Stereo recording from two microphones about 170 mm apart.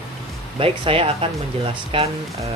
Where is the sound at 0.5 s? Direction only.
35° right (ahead or behind).